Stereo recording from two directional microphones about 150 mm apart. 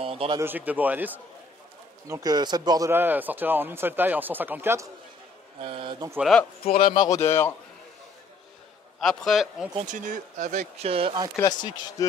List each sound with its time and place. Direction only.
0.0 s a man's voice: 40° right (ahead or behind)
0.4 s a man's voice: 10° right (ahead or behind)
2.0 s a man's voice: 25° right (ahead or behind)
5.6 s speech: 35° right (ahead or behind)
6.1 s a man's voice: centre (ahead or behind)
6.9 s speech: 25° left (ahead or behind)
9.0 s a man's voice: centre (ahead or behind)
9.8 s speech: 55° right (ahead or behind); by 11.1 s 40° right (ahead or behind)
11.6 s speech: 30° left (ahead or behind)